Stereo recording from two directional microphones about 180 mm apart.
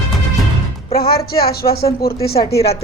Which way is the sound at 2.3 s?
35° left (ahead or behind).